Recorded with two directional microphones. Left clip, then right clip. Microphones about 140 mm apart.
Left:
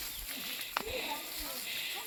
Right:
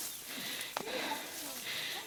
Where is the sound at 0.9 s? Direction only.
55° right (ahead or behind).